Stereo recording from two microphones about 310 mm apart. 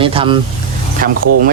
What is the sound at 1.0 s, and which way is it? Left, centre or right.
Speech, right.